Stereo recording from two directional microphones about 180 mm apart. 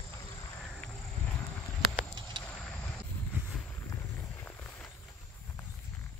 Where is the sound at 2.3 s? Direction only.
25° right (ahead or behind).